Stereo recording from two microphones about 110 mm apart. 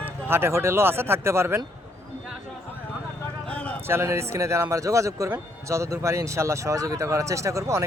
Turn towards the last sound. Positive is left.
turn(degrees=-30)  # may be behind; listen again after turning